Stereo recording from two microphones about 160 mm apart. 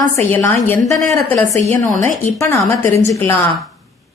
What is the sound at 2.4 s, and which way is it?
Speech, 15° left (ahead or behind).